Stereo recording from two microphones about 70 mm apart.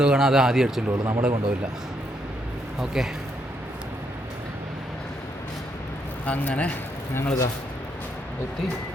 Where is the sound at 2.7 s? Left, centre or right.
Centre.